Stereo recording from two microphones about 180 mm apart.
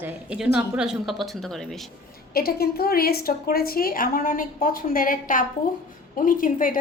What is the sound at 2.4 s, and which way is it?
A woman's voice, 60° left (ahead or behind).